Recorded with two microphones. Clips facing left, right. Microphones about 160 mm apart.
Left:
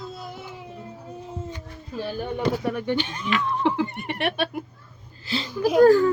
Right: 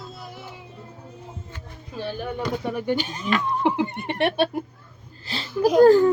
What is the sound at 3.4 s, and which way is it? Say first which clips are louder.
Speech: even; 15° right (ahead or behind).